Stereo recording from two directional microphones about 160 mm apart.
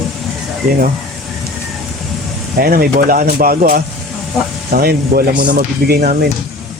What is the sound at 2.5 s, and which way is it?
Speech, 70° right (ahead or behind).